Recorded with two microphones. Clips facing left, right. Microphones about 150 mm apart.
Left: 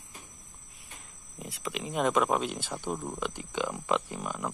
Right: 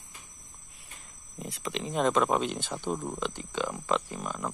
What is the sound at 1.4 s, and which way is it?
Speech, 5° left (ahead or behind).